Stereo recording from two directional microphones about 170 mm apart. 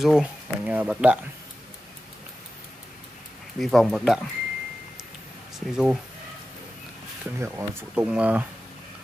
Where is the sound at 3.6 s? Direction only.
Centre (ahead or behind).